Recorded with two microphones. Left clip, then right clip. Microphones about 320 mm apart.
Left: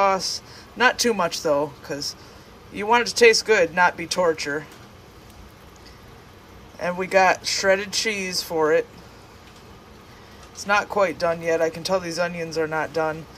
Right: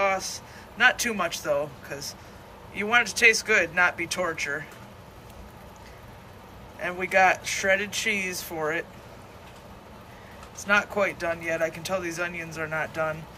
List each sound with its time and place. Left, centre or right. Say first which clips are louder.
0.0 s speech: left 5 dB; centre
6.8 s speech: left 3 dB; centre
10.6 s speech: left 3 dB; centre